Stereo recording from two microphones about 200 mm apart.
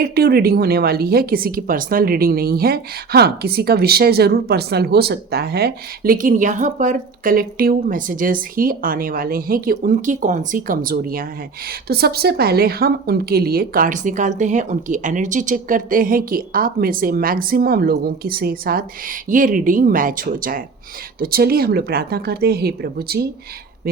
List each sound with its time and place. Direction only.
0.0 s speech: 50° right (ahead or behind)